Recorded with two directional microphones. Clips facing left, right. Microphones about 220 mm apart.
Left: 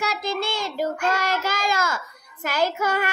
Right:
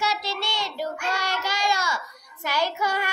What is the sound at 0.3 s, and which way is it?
Child singing, 50° left (ahead or behind).